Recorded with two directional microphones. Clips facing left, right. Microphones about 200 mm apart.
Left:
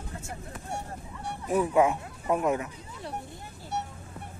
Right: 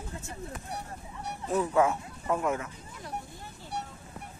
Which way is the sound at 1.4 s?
15° left (ahead or behind).